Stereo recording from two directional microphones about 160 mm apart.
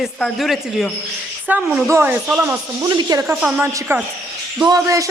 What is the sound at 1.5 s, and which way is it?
Speech, 10° right (ahead or behind).